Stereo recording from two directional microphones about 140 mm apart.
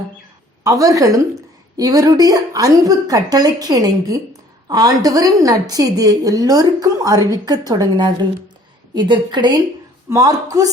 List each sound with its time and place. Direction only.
0.6 s a woman's voice: 25° right (ahead or behind)